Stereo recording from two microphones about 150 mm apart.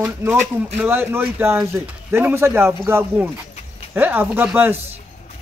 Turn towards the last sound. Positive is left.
turn(degrees=-10)  # may be behind; listen again after turning